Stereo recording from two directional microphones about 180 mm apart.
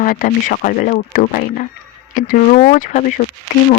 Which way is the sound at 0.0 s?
50° left (ahead or behind).